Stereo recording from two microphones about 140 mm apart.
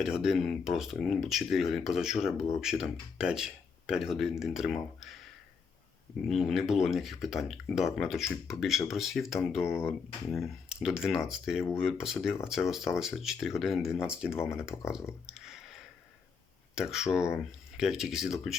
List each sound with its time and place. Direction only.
0.0 s speech: 5° right (ahead or behind)
6.2 s speech: centre (ahead or behind)
9.6 s speech: 20° left (ahead or behind)
10.2 s speech: centre (ahead or behind)
15.3 s a sound: 5° right (ahead or behind)
16.7 s speech: 5° right (ahead or behind)